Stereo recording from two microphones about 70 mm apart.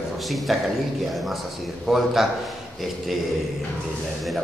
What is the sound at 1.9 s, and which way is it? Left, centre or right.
Speech, centre.